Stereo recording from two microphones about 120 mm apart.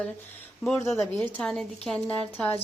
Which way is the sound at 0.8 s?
25° left (ahead or behind).